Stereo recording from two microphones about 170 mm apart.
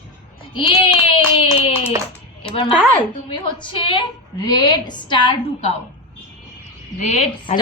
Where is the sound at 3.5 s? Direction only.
30° left (ahead or behind).